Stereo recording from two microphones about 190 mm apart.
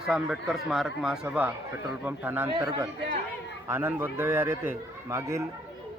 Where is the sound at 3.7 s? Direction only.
10° right (ahead or behind).